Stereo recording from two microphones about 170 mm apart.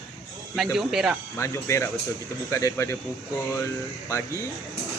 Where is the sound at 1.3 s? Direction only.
15° left (ahead or behind).